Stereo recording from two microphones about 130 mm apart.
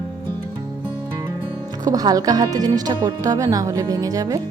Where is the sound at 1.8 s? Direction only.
30° right (ahead or behind).